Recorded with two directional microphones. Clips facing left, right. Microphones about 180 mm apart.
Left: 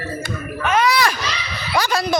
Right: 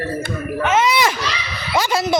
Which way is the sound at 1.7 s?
25° right (ahead or behind).